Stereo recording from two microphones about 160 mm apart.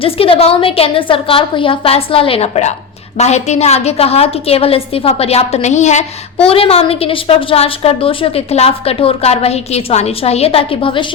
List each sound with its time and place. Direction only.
0.0 s a woman's voice: 35° left (ahead or behind)